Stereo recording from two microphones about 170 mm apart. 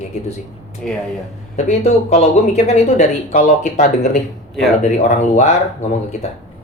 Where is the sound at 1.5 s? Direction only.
40° left (ahead or behind).